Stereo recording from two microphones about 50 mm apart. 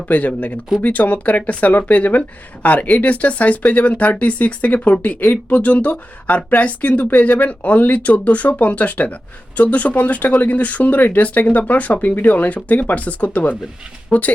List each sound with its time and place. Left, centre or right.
0.1 s speech: left